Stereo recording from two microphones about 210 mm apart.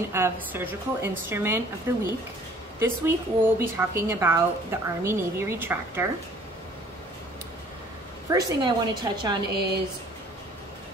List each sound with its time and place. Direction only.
0.1 s a woman's voice: 10° right (ahead or behind)
8.3 s a woman's voice: 20° right (ahead or behind)